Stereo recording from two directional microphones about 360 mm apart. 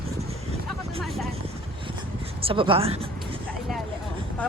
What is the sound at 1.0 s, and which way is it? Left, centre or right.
Vehicle, centre.